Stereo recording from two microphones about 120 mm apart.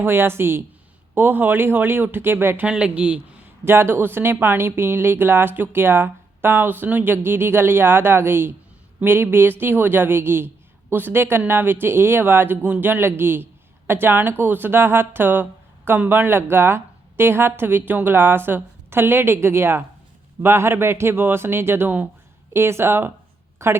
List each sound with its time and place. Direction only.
0.0 s a woman's voice: 20° right (ahead or behind)
2.6 s a woman's voice: 10° right (ahead or behind)